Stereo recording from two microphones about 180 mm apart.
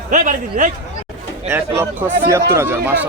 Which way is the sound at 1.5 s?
15° right (ahead or behind).